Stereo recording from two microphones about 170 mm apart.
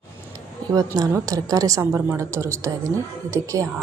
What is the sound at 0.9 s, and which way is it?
A woman's voice, 20° right (ahead or behind).